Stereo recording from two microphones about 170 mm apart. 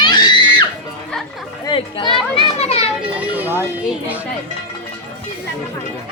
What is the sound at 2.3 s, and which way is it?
Children playing, 35° left (ahead or behind).